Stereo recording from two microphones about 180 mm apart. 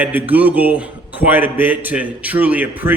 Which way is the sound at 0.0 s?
10° right (ahead or behind).